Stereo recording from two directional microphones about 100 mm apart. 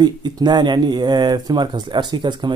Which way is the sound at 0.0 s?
45° right (ahead or behind).